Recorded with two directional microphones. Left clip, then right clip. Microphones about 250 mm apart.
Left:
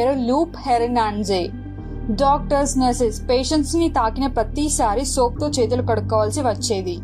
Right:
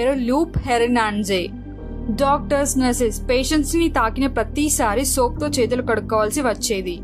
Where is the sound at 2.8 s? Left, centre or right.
Centre.